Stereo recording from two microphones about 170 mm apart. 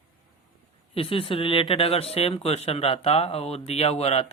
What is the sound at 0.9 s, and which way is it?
Speech, 35° left (ahead or behind).